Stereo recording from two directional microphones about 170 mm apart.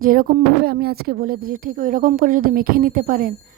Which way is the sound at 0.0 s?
55° right (ahead or behind).